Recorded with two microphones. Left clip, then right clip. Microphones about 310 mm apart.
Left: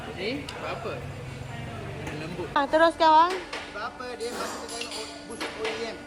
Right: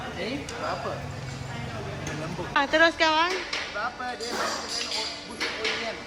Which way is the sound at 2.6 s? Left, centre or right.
Centre.